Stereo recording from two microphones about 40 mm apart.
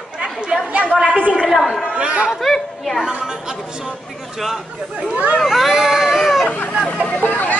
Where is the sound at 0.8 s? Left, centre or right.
Left.